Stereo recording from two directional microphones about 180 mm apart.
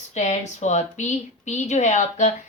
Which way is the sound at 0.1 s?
40° left (ahead or behind).